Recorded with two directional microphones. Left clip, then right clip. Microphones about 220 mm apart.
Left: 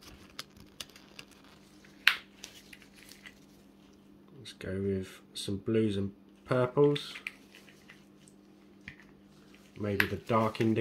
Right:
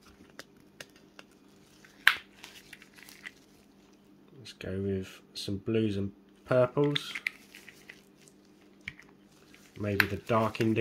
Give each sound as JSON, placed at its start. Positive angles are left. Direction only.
{"t": 4.6, "sound": "speech", "side_deg": -10}
{"t": 6.8, "sound": "speech", "side_deg": -30}
{"t": 9.8, "sound": "speech", "side_deg": -20}